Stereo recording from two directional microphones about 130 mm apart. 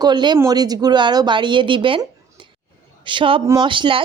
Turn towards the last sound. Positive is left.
turn(degrees=-40)  # may be behind; listen again after turning